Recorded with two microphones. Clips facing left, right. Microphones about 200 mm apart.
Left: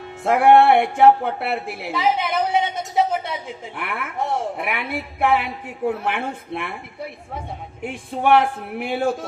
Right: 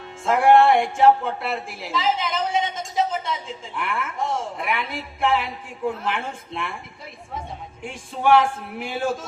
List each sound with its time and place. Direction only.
0.3 s a woman's voice: 60° left (ahead or behind)
7.9 s a woman's voice: 60° left (ahead or behind)